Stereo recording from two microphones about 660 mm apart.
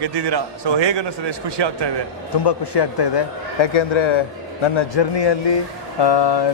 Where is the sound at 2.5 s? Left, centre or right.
Left.